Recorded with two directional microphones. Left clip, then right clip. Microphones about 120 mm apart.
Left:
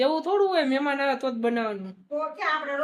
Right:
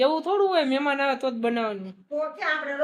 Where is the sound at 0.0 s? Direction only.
10° right (ahead or behind).